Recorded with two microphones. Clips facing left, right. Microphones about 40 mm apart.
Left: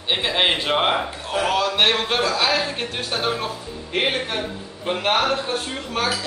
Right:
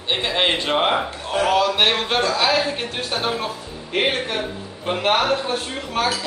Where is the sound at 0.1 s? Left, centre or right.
Centre.